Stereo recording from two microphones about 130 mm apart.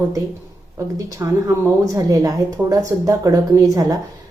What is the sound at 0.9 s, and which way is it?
Speech, 25° right (ahead or behind).